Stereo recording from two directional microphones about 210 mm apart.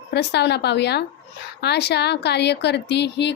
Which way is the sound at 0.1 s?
55° left (ahead or behind).